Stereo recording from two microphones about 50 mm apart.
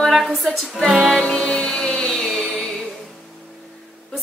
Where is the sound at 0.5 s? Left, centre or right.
Centre.